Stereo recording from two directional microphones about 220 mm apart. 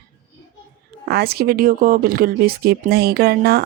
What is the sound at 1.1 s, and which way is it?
Speech, 45° right (ahead or behind).